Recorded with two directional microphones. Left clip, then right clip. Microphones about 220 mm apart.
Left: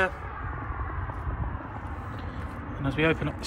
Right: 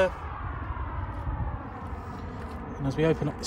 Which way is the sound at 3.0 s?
15° right (ahead or behind).